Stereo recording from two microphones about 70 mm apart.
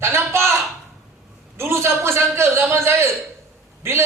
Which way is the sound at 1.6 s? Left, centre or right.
Right.